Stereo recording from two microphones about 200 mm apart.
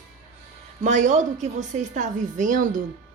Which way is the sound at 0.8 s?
35° right (ahead or behind).